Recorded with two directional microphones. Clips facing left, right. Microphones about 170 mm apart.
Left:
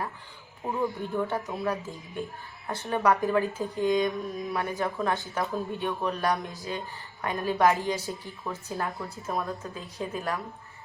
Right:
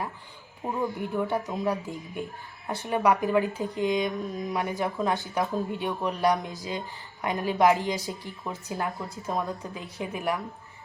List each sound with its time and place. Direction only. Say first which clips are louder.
0.8 s speech: even; 15° right (ahead or behind)